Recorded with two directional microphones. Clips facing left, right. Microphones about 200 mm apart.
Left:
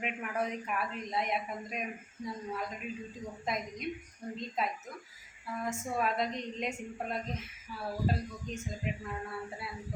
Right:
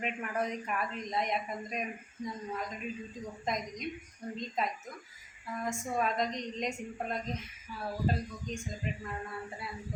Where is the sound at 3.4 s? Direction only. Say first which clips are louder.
Even; 5° left (ahead or behind).